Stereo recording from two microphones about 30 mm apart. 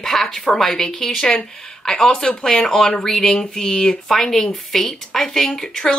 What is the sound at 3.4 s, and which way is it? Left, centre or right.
Speech, left.